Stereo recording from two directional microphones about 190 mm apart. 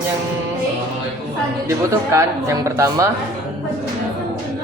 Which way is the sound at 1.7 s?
15° right (ahead or behind).